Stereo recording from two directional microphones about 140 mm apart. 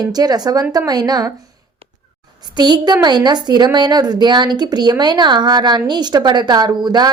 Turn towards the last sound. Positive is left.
turn(degrees=-30)  # may be behind; listen again after turning